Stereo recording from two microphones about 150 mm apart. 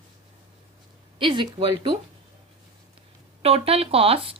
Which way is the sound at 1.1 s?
35° right (ahead or behind).